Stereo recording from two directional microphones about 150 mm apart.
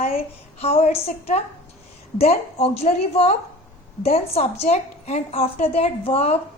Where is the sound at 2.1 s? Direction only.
40° left (ahead or behind).